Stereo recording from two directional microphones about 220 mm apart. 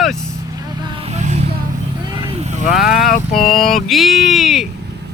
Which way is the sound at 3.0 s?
35° left (ahead or behind).